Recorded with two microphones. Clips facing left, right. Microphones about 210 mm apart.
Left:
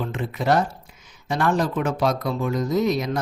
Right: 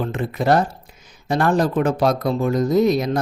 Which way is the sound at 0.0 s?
45° right (ahead or behind).